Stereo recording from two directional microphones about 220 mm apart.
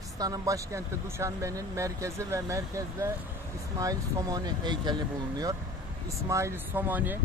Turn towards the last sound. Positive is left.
turn(degrees=-10)  # may be behind; listen again after turning